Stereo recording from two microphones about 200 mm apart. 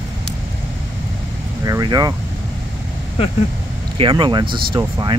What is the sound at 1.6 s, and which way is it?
Speech, 20° right (ahead or behind).